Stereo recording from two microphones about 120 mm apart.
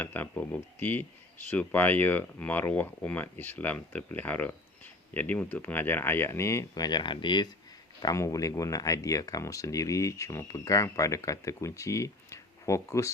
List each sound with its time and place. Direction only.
0.0 s speech: 15° left (ahead or behind); by 7.5 s 40° left (ahead or behind)
8.0 s speech: 25° left (ahead or behind)